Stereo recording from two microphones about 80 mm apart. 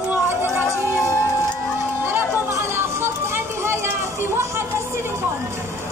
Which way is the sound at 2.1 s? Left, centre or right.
Right.